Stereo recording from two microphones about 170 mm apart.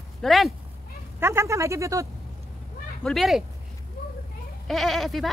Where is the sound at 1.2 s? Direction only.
15° right (ahead or behind).